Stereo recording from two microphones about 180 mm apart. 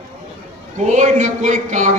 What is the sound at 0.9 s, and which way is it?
A man's voice, 40° right (ahead or behind).